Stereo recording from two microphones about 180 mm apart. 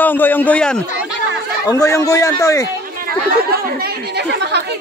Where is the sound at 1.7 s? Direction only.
20° left (ahead or behind).